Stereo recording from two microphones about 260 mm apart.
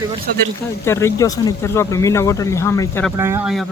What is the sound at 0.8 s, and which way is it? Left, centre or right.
Speech, centre.